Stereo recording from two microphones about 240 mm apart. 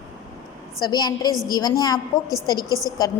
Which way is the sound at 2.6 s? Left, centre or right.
Centre.